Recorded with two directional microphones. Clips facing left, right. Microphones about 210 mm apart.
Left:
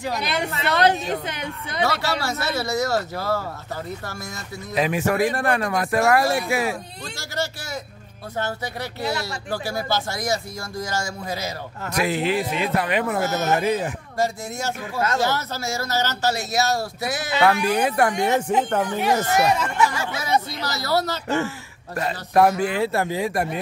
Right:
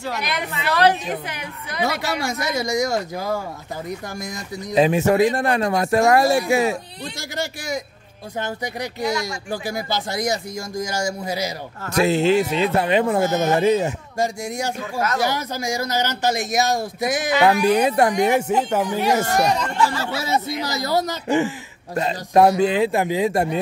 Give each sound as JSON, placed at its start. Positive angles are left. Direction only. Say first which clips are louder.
{"t": 0.2, "sound": "a woman's voice", "louder": "left 1 dB", "side_deg": 30}
{"t": 1.9, "sound": "speech", "louder": "right 2 dB", "side_deg": -15}
{"t": 4.7, "sound": "speech", "louder": "right 5 dB", "side_deg": -25}
{"t": 9.0, "sound": "speech", "louder": "right 3 dB", "side_deg": -15}
{"t": 11.9, "sound": "speech", "louder": "right 6 dB", "side_deg": -25}
{"t": 18.5, "sound": "speech", "louder": "right 1 dB", "side_deg": -5}
{"t": 20.2, "sound": "speech", "louder": "even", "side_deg": -25}